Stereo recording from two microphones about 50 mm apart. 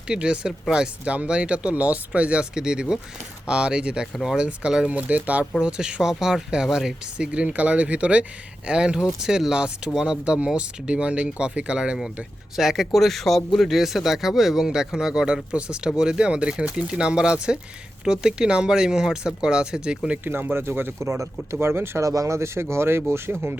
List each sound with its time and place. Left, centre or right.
0.1 s speech: centre
4.0 s speech: centre
4.4 s speech: centre
5.5 s speech: centre
7.3 s speech: right
12.5 s speech: centre
20.2 s speech: right
21.0 s speech: right
22.0 s speech: right